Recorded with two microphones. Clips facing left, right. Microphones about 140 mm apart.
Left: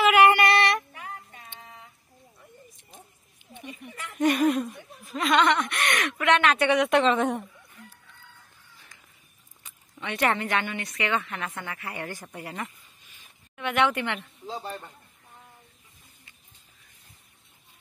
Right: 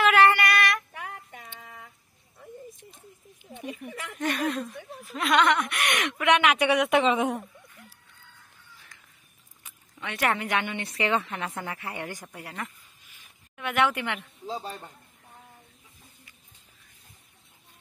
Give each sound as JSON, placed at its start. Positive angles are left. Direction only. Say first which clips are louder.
{"t": 0.1, "sound": "female singing", "louder": "left 2 dB", "side_deg": 15}
{"t": 1.0, "sound": "music", "louder": "right 1 dB", "side_deg": -90}
{"t": 3.4, "sound": "a sound", "louder": "right 5 dB", "side_deg": 25}
{"t": 4.2, "sound": "speech", "louder": "left 6 dB", "side_deg": 15}
{"t": 5.1, "sound": "speech", "louder": "left 1 dB", "side_deg": 0}
{"t": 9.6, "sound": "speech", "louder": "left 1 dB", "side_deg": -5}
{"t": 10.8, "sound": "speech", "louder": "right 2 dB", "side_deg": -30}
{"t": 12.0, "sound": "speech", "louder": "even", "side_deg": -15}
{"t": 12.3, "sound": "speech", "louder": "left 2 dB", "side_deg": 0}